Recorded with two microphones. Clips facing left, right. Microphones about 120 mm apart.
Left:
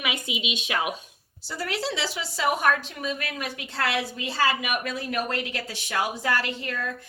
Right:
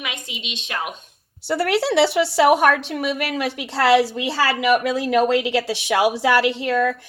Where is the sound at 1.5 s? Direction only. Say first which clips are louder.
Right 10 dB; 70° right (ahead or behind).